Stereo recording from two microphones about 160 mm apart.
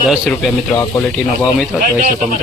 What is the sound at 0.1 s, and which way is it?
Speech, centre (ahead or behind).